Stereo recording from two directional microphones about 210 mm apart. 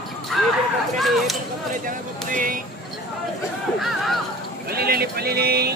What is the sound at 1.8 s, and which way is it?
Music, 40° right (ahead or behind).